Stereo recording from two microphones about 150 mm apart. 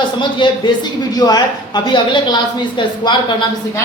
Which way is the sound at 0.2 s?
30° left (ahead or behind).